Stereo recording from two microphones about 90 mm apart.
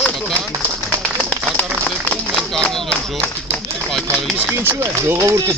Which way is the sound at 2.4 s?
5° left (ahead or behind).